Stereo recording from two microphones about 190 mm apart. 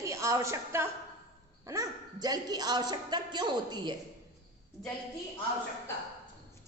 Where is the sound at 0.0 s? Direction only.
15° right (ahead or behind).